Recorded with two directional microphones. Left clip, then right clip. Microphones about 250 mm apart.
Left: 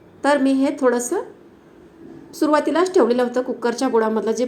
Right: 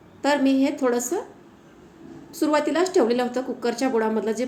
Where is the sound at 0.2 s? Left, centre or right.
Centre.